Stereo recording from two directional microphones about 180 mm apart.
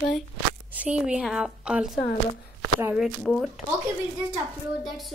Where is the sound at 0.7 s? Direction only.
5° right (ahead or behind).